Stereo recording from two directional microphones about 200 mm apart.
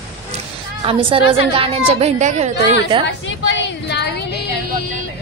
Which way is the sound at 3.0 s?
65° left (ahead or behind).